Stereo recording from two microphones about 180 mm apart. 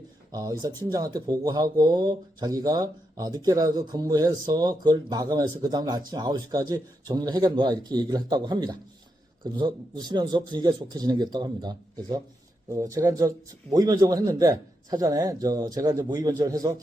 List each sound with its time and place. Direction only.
0.3 s speech: 20° right (ahead or behind)